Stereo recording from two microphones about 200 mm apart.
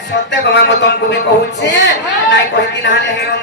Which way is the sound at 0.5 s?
55° left (ahead or behind).